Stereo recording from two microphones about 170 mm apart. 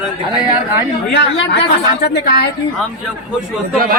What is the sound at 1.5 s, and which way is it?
Speech, 75° left (ahead or behind).